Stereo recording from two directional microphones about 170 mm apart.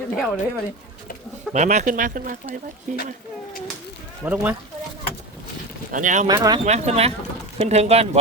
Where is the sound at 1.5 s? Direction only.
45° right (ahead or behind).